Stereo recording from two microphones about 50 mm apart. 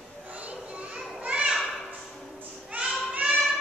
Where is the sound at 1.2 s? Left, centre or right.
Right.